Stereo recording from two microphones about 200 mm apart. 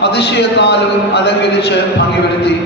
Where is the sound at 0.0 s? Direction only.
55° left (ahead or behind).